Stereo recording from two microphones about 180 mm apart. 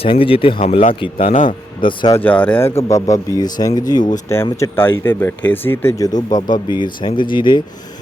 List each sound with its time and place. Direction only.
0.0 s speech: 30° left (ahead or behind)
1.8 s speech: 25° left (ahead or behind)
2.1 s speech: 10° left (ahead or behind); by 7.6 s 25° left (ahead or behind)